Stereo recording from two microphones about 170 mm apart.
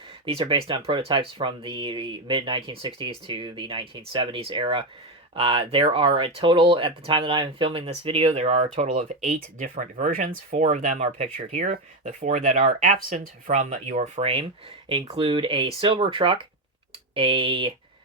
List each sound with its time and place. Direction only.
0.3 s speech: 30° right (ahead or behind)